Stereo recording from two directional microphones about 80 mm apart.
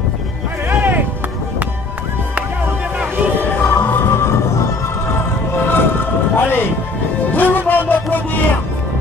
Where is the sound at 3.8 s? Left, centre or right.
Left.